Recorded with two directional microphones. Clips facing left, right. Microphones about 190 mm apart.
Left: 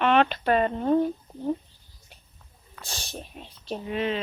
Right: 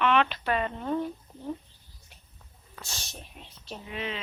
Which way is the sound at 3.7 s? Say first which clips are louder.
Left 8 dB; 40° left (ahead or behind).